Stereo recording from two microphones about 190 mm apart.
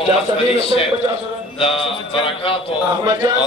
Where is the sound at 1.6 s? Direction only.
30° left (ahead or behind).